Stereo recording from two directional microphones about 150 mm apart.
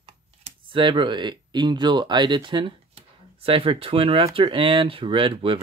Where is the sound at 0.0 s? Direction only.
35° right (ahead or behind).